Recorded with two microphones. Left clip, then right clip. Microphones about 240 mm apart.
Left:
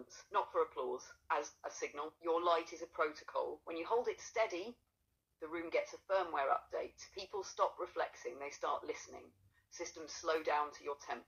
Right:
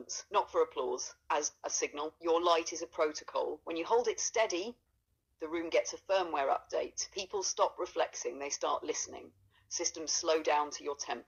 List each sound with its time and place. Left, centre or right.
0.1 s speech: right